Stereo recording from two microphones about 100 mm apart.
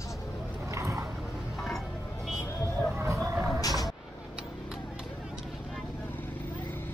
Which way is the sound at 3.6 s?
35° left (ahead or behind).